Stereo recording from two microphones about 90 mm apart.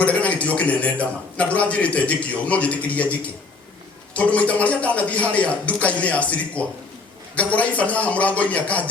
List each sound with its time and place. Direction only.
0.0 s a man's voice: 15° left (ahead or behind)